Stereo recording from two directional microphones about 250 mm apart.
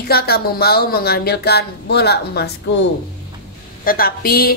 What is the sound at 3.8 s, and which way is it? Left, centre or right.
Speech, left.